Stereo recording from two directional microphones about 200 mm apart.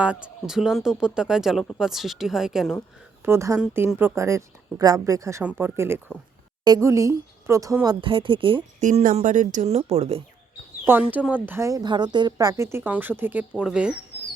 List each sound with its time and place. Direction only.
0.0 s speech: 5° right (ahead or behind)
3.2 s speech: 15° right (ahead or behind)
8.8 s speech: 40° right (ahead or behind)
11.1 s speech: 10° right (ahead or behind)